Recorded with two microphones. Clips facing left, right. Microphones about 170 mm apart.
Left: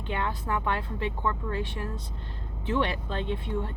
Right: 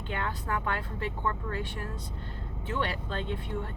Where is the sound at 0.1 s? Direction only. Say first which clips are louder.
Left 3 dB; 25° left (ahead or behind).